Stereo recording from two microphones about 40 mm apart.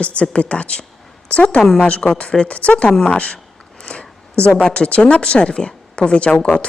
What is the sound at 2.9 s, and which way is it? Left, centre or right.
Speech, centre.